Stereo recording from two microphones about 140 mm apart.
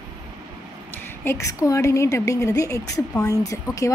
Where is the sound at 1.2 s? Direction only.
20° left (ahead or behind).